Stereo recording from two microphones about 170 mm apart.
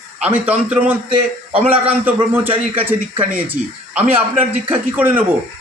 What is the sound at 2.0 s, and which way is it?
Speech, 10° right (ahead or behind).